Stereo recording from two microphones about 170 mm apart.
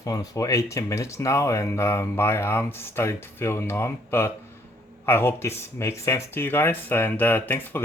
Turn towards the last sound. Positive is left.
turn(degrees=10)  # may be behind; listen again after turning